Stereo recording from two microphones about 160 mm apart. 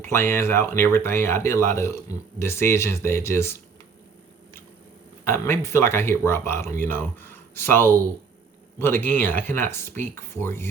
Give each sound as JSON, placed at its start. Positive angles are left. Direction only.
{"t": 0.0, "sound": "speech", "side_deg": 15}
{"t": 5.2, "sound": "speech", "side_deg": 15}